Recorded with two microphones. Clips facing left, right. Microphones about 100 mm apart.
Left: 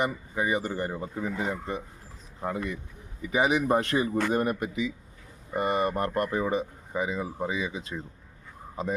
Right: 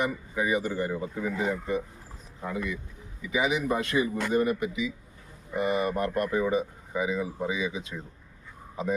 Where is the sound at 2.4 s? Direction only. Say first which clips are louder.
Left 1 dB; 40° left (ahead or behind).